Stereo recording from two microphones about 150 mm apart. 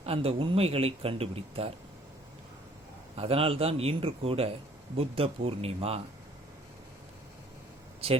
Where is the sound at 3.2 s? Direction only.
40° right (ahead or behind).